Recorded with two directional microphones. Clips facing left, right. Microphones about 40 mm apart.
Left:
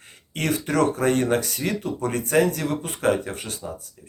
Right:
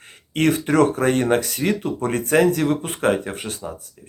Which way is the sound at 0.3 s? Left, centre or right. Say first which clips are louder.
Right 5 dB; right.